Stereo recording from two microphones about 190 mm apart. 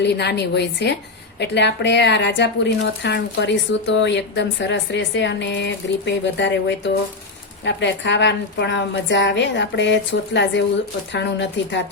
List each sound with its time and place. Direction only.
0.0 s a woman's voice: 60° left (ahead or behind)